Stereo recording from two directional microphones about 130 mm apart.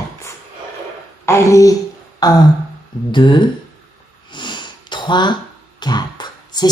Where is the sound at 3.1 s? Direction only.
35° left (ahead or behind).